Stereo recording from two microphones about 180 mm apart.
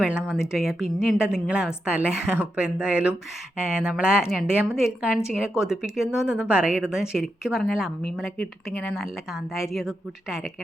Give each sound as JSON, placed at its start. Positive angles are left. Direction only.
{"t": 0.0, "sound": "a woman's voice", "side_deg": -5}